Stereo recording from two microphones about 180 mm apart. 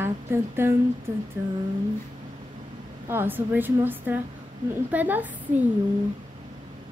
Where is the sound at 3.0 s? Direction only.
10° right (ahead or behind).